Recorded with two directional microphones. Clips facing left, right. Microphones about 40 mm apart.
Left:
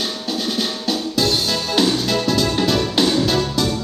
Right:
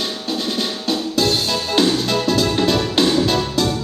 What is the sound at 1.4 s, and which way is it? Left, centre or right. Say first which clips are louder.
Music: right 1 dB; right.